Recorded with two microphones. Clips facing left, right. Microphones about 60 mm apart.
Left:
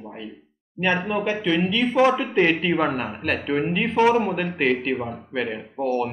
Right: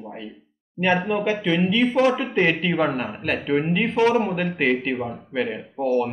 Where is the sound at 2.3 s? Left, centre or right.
Centre.